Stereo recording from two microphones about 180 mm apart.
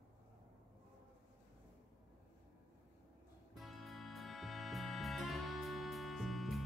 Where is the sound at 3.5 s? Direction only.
Centre (ahead or behind).